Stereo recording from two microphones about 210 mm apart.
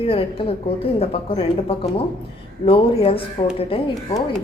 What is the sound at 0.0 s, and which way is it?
A woman's voice, 25° left (ahead or behind).